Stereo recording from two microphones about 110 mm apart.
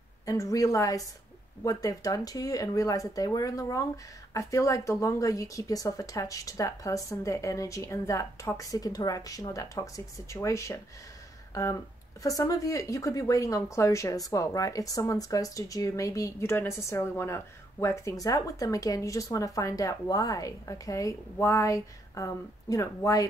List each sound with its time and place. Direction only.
0.2 s a woman's voice: 30° left (ahead or behind)